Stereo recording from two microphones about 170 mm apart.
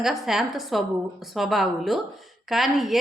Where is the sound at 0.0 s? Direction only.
Centre (ahead or behind).